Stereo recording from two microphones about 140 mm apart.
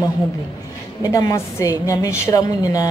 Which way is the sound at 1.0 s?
25° left (ahead or behind).